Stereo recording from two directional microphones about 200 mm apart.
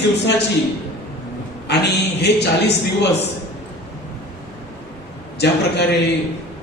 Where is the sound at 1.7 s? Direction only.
55° left (ahead or behind).